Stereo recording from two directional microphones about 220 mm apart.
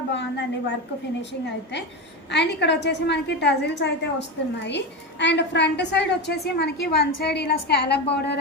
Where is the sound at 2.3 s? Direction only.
50° left (ahead or behind).